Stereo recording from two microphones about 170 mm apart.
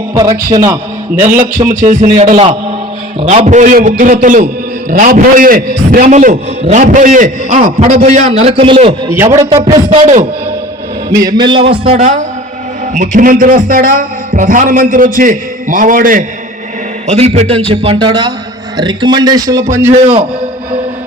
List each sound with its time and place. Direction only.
0.1 s a man's voice: 25° right (ahead or behind)
1.7 s a man's voice: 50° right (ahead or behind); by 9.0 s 30° right (ahead or behind)
9.0 s a man's voice: 15° right (ahead or behind)
9.5 s a man's voice: 30° right (ahead or behind)
11.1 s speech: 20° right (ahead or behind)
12.9 s a man's voice: 50° right (ahead or behind)
17.1 s a man's voice: 40° right (ahead or behind); by 19.6 s 20° right (ahead or behind)